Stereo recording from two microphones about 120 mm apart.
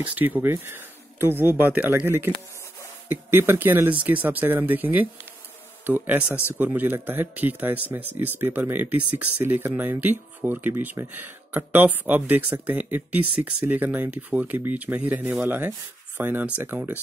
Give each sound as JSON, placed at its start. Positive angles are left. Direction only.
{"t": 0.0, "sound": "speech", "side_deg": -15}